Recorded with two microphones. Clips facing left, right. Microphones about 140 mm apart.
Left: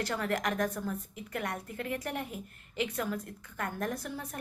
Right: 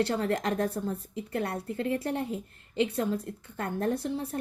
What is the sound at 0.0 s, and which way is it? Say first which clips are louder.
A woman's voice: right 5 dB; 30° right (ahead or behind).